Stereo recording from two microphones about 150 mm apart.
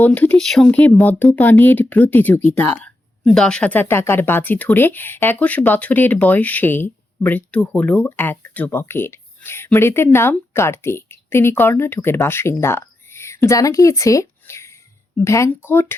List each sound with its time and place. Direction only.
0.0 s speech: 10° left (ahead or behind)